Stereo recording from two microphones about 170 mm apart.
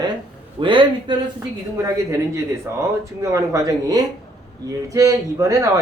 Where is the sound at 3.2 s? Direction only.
20° right (ahead or behind).